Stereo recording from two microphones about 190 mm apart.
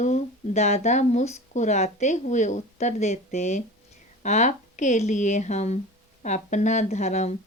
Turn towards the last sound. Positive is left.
turn(degrees=35)  # may be behind; listen again after turning